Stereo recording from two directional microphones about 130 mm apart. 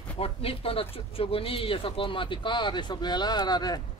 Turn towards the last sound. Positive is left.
turn(degrees=30)  # may be behind; listen again after turning